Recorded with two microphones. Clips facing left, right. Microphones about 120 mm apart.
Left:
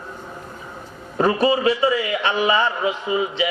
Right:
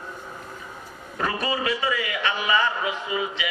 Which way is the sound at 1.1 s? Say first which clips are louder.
Left 9 dB; 30° left (ahead or behind).